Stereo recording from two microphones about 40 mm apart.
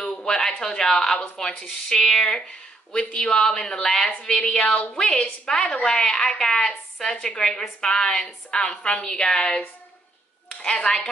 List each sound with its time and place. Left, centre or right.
0.0 s a woman's voice: centre
4.6 s speech: left
4.9 s a woman's voice: centre
10.6 s speech: left